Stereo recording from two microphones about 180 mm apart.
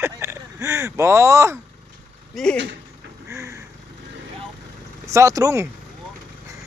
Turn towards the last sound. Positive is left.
turn(degrees=-15)  # may be behind; listen again after turning